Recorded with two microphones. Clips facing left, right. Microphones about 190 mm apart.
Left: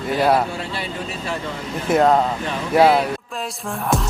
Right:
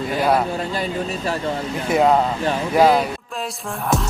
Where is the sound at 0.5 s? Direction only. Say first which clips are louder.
Right 4 dB; 40° right (ahead or behind).